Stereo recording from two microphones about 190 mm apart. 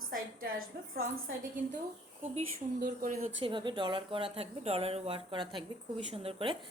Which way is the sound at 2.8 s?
45° right (ahead or behind).